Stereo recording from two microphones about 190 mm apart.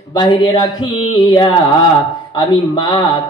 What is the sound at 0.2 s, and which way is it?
A man's voice, 25° left (ahead or behind).